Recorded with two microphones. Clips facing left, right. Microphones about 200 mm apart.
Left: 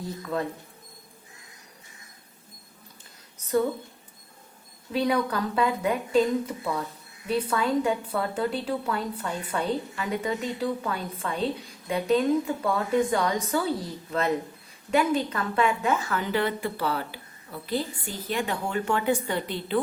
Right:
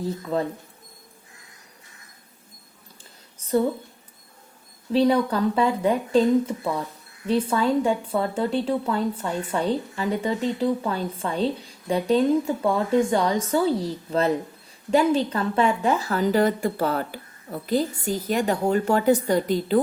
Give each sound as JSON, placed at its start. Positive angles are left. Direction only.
{"t": 4.9, "sound": "a woman's voice", "side_deg": -30}